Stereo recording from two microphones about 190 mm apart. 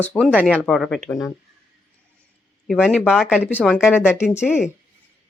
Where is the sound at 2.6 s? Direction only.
Centre (ahead or behind).